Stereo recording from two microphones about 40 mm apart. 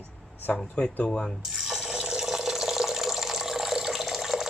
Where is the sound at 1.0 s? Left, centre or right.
Centre.